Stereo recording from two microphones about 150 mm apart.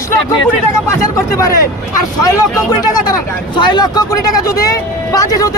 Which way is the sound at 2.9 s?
30° left (ahead or behind).